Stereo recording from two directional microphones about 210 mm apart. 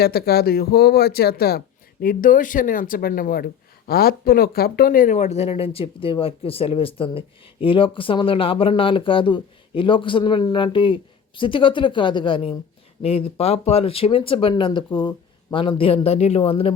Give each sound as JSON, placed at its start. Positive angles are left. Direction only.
{"t": 0.0, "sound": "speech", "side_deg": 50}